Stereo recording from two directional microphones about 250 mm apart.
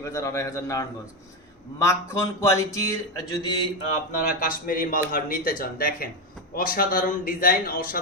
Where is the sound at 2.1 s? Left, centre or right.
Centre.